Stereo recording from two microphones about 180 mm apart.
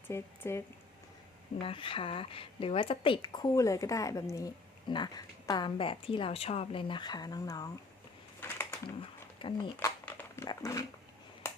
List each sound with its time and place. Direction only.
0.1 s speech: 15° left (ahead or behind)
1.6 s a woman's voice: 30° left (ahead or behind)
8.4 s a sound: 15° left (ahead or behind)
9.0 s speech: 30° left (ahead or behind)
10.1 s dog: 10° left (ahead or behind)
11.4 s finger snapping: 15° left (ahead or behind)